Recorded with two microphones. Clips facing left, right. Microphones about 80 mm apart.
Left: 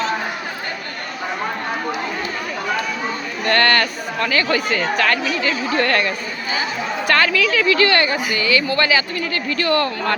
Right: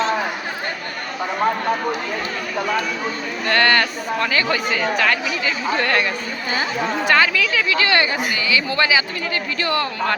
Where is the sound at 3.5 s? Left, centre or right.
Centre.